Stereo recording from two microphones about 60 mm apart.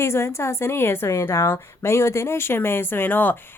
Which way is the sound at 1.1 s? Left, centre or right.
Left.